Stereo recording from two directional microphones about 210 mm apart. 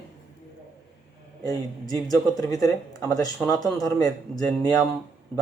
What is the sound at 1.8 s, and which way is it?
Speech, 15° left (ahead or behind).